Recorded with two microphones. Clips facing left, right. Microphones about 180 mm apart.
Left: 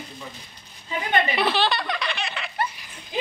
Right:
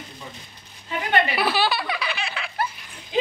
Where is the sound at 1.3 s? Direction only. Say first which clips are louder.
Even; 5° right (ahead or behind).